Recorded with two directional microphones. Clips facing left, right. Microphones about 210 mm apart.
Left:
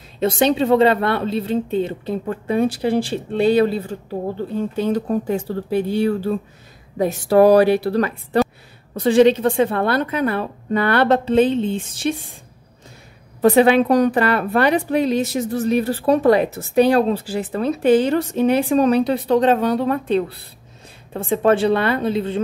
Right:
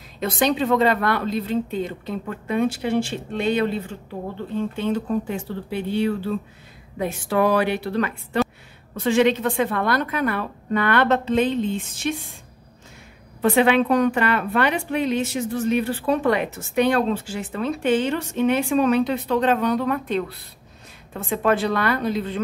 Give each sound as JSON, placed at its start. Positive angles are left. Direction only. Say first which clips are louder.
{"t": 0.2, "sound": "a woman's voice", "louder": "left 4 dB", "side_deg": 30}
{"t": 13.4, "sound": "a woman's voice", "louder": "left 5 dB", "side_deg": 40}